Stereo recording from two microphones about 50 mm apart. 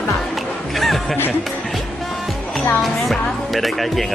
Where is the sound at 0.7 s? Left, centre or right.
Centre.